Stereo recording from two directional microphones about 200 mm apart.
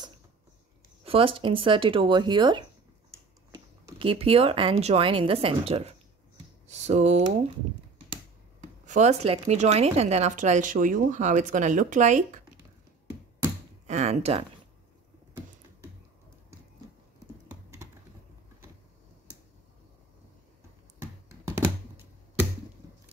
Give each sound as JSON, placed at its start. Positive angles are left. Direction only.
{"t": 1.0, "sound": "a woman's voice", "side_deg": -25}
{"t": 4.0, "sound": "a woman's voice", "side_deg": -25}
{"t": 8.8, "sound": "speech", "side_deg": -35}
{"t": 13.8, "sound": "speech", "side_deg": -35}
{"t": 17.5, "sound": "computer keyboard", "side_deg": -15}
{"t": 21.0, "sound": "a sound", "side_deg": -15}